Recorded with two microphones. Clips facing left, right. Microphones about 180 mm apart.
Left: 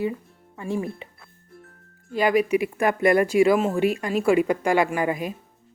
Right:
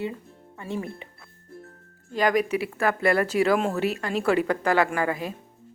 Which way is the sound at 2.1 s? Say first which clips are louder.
Left 3 dB; 10° left (ahead or behind).